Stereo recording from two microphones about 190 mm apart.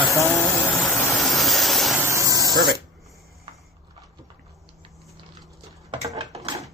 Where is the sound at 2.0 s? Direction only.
15° right (ahead or behind).